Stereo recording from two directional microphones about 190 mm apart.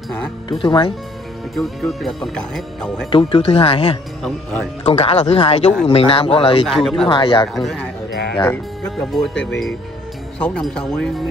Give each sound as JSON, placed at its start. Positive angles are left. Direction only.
{"t": 0.5, "sound": "speech", "side_deg": 25}
{"t": 1.5, "sound": "speech", "side_deg": 0}
{"t": 3.1, "sound": "speech", "side_deg": 25}
{"t": 6.6, "sound": "speech", "side_deg": 0}
{"t": 7.1, "sound": "speech", "side_deg": 25}
{"t": 7.5, "sound": "speech", "side_deg": 0}
{"t": 8.1, "sound": "music", "side_deg": 60}
{"t": 8.9, "sound": "speech", "side_deg": 0}